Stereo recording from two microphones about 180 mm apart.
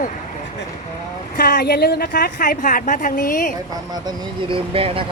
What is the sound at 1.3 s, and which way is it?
A woman's voice, 60° left (ahead or behind).